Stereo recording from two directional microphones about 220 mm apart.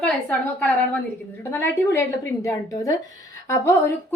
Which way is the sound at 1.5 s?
10° left (ahead or behind).